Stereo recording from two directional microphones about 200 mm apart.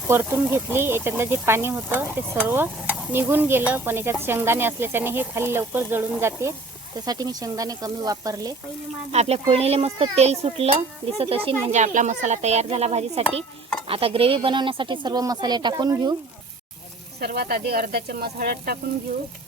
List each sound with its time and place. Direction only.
0.1 s speech: 10° right (ahead or behind)
9.1 s a sound: 30° right (ahead or behind)
13.8 s speech: 30° right (ahead or behind)
17.2 s speech: 50° right (ahead or behind)